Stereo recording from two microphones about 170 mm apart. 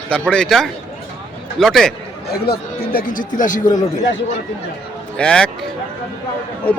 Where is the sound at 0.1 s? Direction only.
5° left (ahead or behind).